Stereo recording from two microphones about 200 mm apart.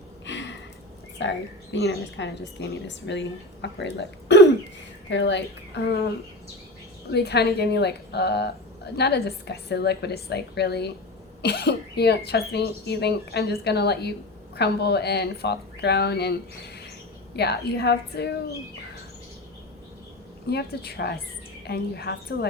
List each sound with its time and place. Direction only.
0.3 s a sound: 65° left (ahead or behind)
1.2 s speech: 65° left (ahead or behind)
7.1 s speech: 55° left (ahead or behind)
17.3 s speech: 55° left (ahead or behind)
20.5 s a woman's voice: 55° left (ahead or behind)